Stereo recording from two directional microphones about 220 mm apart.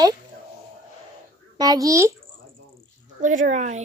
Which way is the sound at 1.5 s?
15° right (ahead or behind).